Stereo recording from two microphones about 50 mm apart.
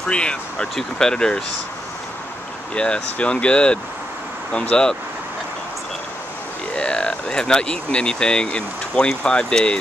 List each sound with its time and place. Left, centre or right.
0.0 s speech: centre
2.7 s speech: left
6.7 s speech: centre